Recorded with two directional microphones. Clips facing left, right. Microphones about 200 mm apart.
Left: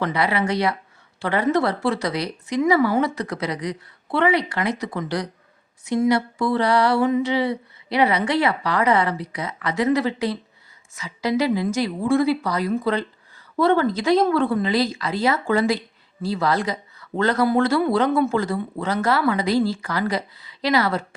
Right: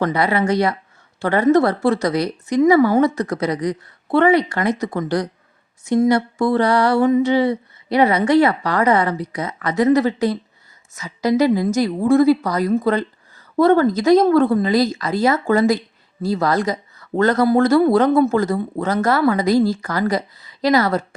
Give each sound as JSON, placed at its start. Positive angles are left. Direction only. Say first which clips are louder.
{"t": 0.0, "sound": "speech", "louder": "right 4 dB", "side_deg": -45}